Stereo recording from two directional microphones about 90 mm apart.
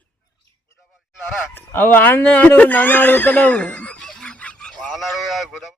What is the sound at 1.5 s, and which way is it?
Speech, 25° left (ahead or behind).